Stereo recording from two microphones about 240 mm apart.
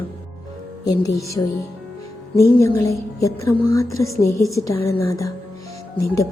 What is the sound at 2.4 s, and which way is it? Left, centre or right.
A woman's voice, centre.